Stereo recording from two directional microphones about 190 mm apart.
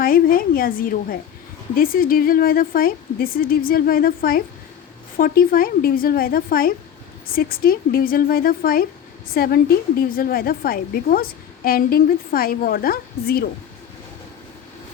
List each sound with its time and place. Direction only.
0.0 s a woman's voice: 50° left (ahead or behind)